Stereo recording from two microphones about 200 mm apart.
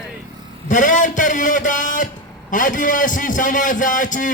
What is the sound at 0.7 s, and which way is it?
A man's voice, 40° left (ahead or behind).